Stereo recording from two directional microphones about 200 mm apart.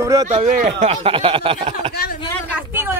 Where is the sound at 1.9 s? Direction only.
50° left (ahead or behind).